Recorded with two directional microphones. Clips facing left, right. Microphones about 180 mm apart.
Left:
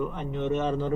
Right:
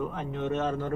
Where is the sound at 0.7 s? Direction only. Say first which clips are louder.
Left 3 dB; 15° left (ahead or behind).